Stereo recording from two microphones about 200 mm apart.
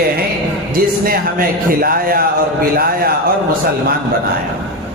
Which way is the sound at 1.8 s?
45° right (ahead or behind).